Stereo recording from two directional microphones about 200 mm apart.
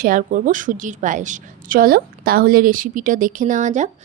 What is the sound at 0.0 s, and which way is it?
A woman's voice, 40° right (ahead or behind).